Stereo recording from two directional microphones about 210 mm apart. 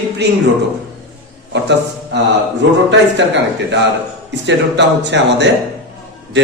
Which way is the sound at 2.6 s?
60° right (ahead or behind).